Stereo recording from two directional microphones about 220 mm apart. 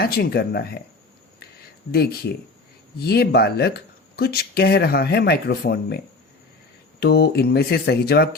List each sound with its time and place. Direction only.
0.0 s speech: 45° left (ahead or behind)
1.9 s speech: 45° left (ahead or behind)
7.0 s speech: 45° left (ahead or behind)